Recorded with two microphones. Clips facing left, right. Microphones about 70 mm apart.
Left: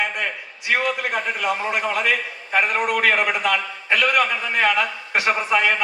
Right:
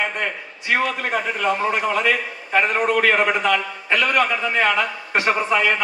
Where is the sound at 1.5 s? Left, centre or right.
Right.